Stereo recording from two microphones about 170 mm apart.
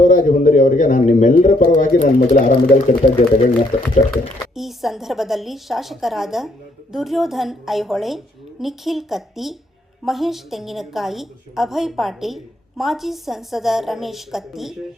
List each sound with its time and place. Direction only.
0.0 s a man's voice: 50° left (ahead or behind)
4.1 s a woman's voice: centre (ahead or behind)